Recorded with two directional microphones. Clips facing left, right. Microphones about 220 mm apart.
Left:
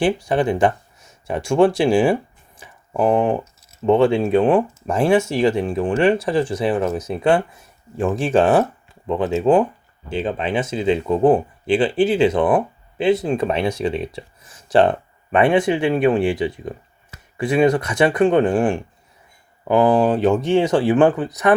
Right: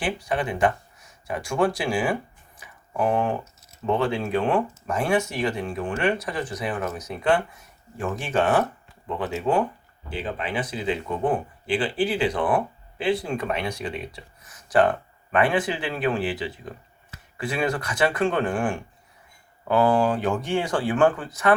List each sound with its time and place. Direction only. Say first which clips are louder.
0.0 s speech: left 8 dB; 30° left (ahead or behind)
2.6 s a sound: left 6 dB; 25° left (ahead or behind)
3.8 s speech: left 9 dB; 25° left (ahead or behind)